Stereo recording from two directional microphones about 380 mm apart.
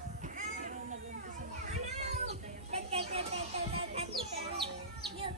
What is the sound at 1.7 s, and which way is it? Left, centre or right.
Children playing, centre.